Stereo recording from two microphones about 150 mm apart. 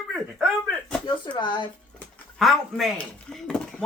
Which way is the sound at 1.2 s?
35° left (ahead or behind).